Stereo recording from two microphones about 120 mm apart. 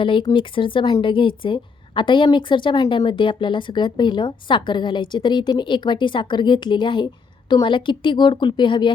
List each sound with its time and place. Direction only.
0.0 s a woman's voice: 45° left (ahead or behind)